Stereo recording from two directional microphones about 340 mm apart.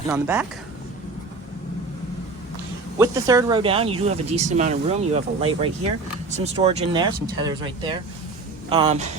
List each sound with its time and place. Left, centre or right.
0.1 s speech: centre
3.0 s speech: centre